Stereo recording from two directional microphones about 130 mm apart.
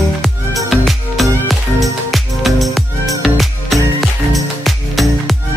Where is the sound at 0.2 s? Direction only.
Centre (ahead or behind).